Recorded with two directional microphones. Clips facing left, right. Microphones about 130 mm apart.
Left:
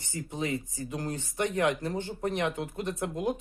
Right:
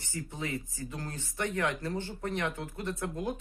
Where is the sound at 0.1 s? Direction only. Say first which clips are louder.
Left 4 dB; 20° left (ahead or behind).